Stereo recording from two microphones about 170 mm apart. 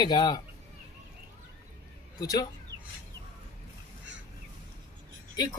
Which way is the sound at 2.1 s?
20° left (ahead or behind).